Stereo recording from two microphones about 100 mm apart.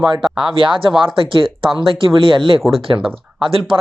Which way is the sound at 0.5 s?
60° right (ahead or behind).